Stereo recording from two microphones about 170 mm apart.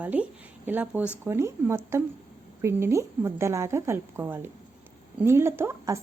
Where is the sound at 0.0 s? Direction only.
10° right (ahead or behind).